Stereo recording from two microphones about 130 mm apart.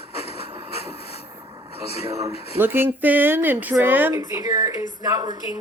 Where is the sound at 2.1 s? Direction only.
25° right (ahead or behind).